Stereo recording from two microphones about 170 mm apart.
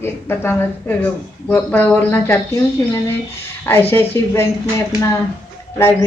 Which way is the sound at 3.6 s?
15° left (ahead or behind).